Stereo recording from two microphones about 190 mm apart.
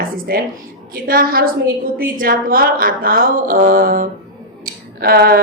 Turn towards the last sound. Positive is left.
turn(degrees=-55)  # may be behind; listen again after turning